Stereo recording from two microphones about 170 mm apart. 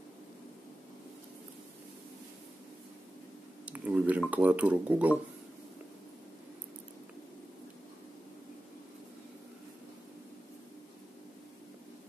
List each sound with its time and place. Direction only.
3.6 s speech: 10° right (ahead or behind)